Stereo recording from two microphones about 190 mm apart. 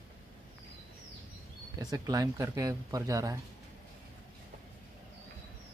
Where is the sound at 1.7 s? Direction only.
20° right (ahead or behind).